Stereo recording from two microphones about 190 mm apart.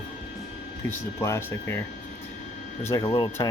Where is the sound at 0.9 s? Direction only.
15° left (ahead or behind).